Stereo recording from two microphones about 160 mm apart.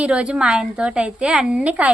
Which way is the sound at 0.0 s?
5° right (ahead or behind).